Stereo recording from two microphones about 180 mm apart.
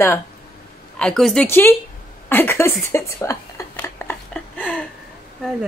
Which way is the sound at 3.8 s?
10° left (ahead or behind).